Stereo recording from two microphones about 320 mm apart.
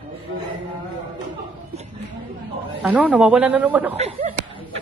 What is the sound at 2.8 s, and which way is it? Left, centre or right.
A woman's voice, centre.